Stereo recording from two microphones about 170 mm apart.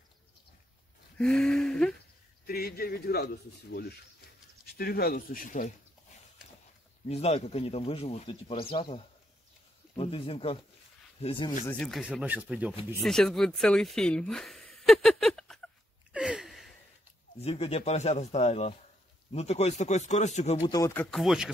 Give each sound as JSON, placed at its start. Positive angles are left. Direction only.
{"t": 1.1, "sound": "a sound", "side_deg": 5}
{"t": 2.4, "sound": "a man's voice", "side_deg": 65}
{"t": 7.1, "sound": "speech", "side_deg": 40}
{"t": 11.7, "sound": "speech", "side_deg": 0}
{"t": 13.0, "sound": "a sound", "side_deg": 5}
{"t": 17.4, "sound": "speech", "side_deg": 35}
{"t": 20.6, "sound": "speech", "side_deg": 20}
{"t": 21.1, "sound": "speech", "side_deg": 0}